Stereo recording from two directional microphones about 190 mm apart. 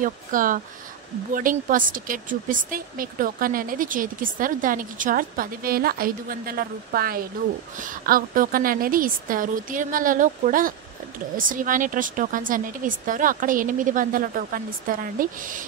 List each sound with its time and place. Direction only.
0.0 s speech: 45° right (ahead or behind)